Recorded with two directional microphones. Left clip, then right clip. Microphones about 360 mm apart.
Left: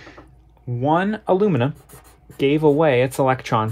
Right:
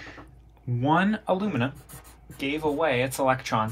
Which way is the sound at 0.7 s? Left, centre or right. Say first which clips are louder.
Left 4 dB; centre.